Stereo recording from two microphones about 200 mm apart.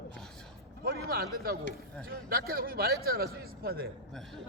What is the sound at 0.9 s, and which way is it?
A man's voice, 50° right (ahead or behind).